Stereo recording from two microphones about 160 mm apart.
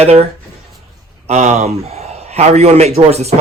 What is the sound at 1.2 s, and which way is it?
Speech, 45° right (ahead or behind).